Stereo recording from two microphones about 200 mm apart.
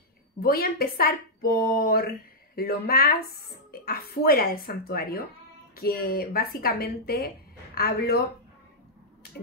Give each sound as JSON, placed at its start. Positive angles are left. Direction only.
{"t": 0.4, "sound": "a woman's voice", "side_deg": 50}